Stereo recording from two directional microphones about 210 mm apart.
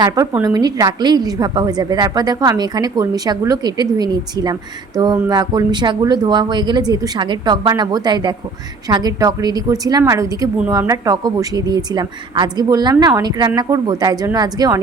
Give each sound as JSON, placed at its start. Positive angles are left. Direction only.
{"t": 0.3, "sound": "a woman's voice", "side_deg": -15}